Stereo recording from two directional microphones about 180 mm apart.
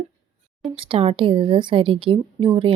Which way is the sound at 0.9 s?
30° right (ahead or behind).